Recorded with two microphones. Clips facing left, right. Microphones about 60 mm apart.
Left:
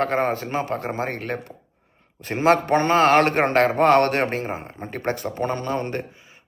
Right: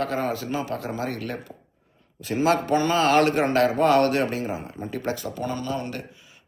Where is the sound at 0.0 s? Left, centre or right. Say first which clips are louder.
Left 4 dB; left.